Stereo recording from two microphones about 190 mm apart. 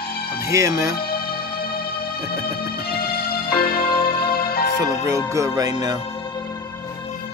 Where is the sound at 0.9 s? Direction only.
55° left (ahead or behind).